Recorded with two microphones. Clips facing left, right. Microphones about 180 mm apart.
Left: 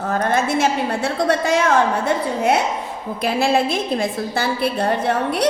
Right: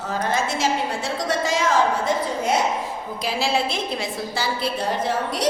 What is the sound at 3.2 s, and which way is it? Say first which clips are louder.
A woman's voice: left 6 dB; 55° left (ahead or behind).